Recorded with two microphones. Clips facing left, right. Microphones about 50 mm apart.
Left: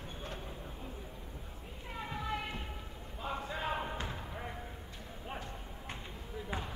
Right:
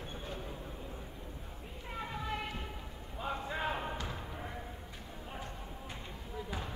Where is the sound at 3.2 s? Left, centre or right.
Centre.